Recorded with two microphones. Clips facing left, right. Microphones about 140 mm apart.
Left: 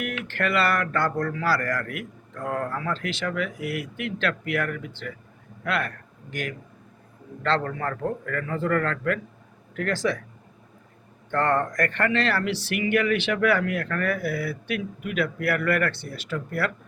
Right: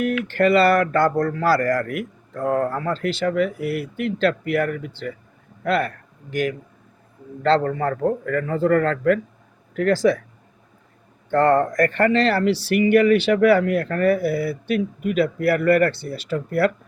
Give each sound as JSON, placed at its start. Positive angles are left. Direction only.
{"t": 0.3, "sound": "a man's voice", "side_deg": -35}
{"t": 7.4, "sound": "a man's voice", "side_deg": -30}
{"t": 11.3, "sound": "a man's voice", "side_deg": -35}